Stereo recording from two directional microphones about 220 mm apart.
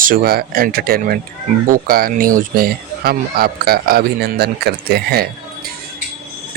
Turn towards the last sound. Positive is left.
turn(degrees=-45)  # may be behind; listen again after turning